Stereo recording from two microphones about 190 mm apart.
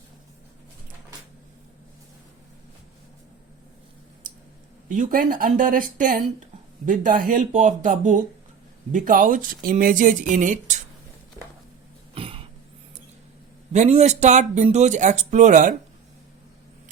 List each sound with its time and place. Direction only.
4.9 s speech: 45° right (ahead or behind)
12.1 s throat clearing: 30° right (ahead or behind)
13.7 s speech: 35° right (ahead or behind)